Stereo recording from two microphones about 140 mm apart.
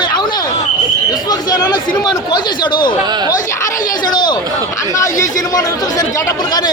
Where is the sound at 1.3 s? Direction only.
30° left (ahead or behind).